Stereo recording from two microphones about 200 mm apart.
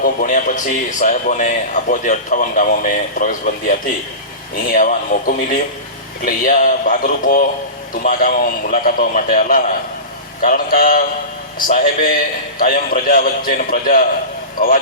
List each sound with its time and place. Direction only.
0.0 s a man's voice: 40° left (ahead or behind)